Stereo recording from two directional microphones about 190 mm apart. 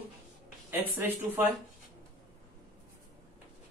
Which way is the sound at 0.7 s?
10° right (ahead or behind).